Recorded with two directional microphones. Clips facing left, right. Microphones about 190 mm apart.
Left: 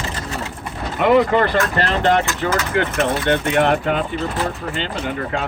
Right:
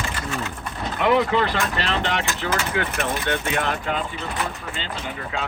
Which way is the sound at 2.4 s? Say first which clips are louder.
Left 5 dB; 60° left (ahead or behind).